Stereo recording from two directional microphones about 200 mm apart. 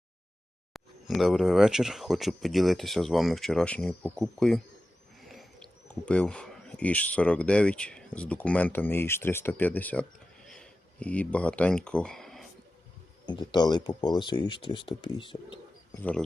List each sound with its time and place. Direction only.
0.7 s speech: centre (ahead or behind)
13.2 s speech: 20° left (ahead or behind)
16.0 s speech: 5° left (ahead or behind)